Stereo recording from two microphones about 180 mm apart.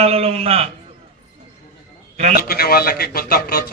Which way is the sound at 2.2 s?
40° right (ahead or behind).